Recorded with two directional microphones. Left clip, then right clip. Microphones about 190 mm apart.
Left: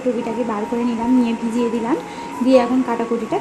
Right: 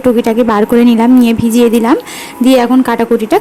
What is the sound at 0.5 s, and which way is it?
Speech, 40° right (ahead or behind).